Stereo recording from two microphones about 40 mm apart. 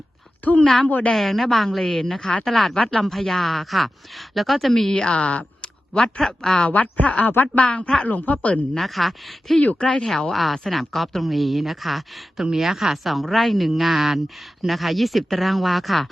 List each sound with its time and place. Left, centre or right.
0.4 s a woman's voice: left
1.1 s speech: centre
1.8 s speech: centre
2.7 s speech: centre
5.1 s a sound: left
6.0 s speech: centre
6.7 s speech: left
7.4 s speech: left
8.8 s speech: centre
9.6 s speech: left
10.1 s speech: centre
10.3 s speech: centre